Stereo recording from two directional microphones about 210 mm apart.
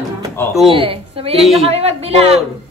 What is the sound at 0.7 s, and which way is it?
A woman's voice, 25° right (ahead or behind).